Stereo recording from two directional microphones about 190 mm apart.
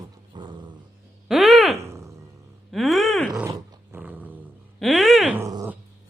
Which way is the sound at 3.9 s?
10° right (ahead or behind).